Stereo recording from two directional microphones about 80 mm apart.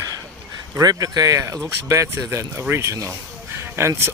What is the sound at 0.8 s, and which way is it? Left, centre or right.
Speech, right.